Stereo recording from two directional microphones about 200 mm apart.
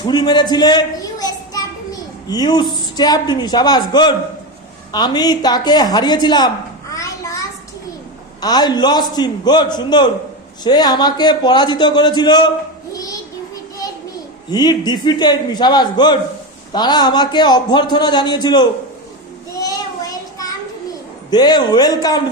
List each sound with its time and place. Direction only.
0.0 s a child's voice: 20° left (ahead or behind)
6.9 s a sound: 15° left (ahead or behind)
8.4 s a man's voice: 20° left (ahead or behind)
12.9 s child singing: 15° left (ahead or behind)
14.5 s a man's voice: 20° left (ahead or behind)
19.5 s child singing: 20° left (ahead or behind)
21.2 s a man's voice: 20° left (ahead or behind)